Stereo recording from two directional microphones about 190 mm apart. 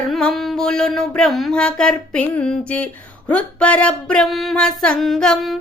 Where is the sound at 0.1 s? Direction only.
Centre (ahead or behind).